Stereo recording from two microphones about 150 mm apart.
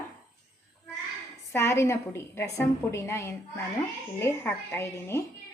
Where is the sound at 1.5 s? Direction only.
15° left (ahead or behind).